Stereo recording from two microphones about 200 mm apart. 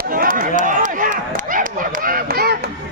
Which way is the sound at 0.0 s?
45° right (ahead or behind).